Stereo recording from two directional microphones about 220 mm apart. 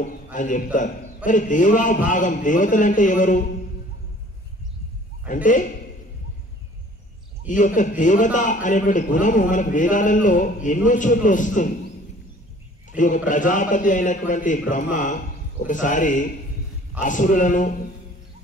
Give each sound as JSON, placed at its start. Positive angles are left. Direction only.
{"t": 0.0, "sound": "a man's voice", "side_deg": 35}
{"t": 5.3, "sound": "a man's voice", "side_deg": 35}
{"t": 7.4, "sound": "a man's voice", "side_deg": 35}
{"t": 12.9, "sound": "a man's voice", "side_deg": 35}